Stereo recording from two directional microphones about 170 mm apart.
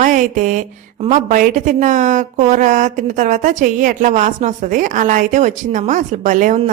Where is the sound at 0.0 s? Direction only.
50° right (ahead or behind).